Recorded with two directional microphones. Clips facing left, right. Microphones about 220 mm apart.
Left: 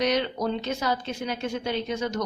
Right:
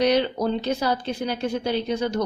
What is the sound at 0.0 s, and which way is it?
A woman's voice, 30° right (ahead or behind).